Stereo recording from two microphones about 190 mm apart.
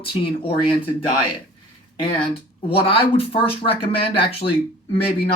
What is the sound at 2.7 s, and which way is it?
Speech, 30° left (ahead or behind).